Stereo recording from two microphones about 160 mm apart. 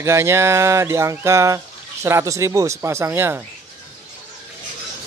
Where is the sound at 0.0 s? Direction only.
15° right (ahead or behind).